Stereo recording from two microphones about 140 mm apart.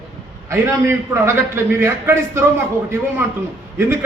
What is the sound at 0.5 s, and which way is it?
A man's voice, 20° right (ahead or behind).